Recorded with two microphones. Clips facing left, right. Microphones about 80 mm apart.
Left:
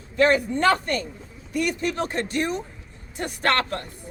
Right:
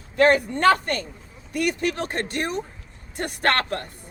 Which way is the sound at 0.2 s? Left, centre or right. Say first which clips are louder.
Right 1 dB; right.